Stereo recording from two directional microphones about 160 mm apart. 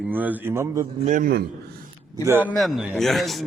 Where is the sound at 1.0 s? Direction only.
60° right (ahead or behind).